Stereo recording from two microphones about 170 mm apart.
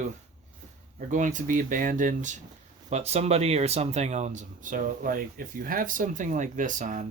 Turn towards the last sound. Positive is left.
turn(degrees=-50)  # may be behind; listen again after turning